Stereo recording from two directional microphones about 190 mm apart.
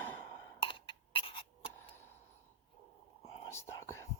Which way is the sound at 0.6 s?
25° left (ahead or behind).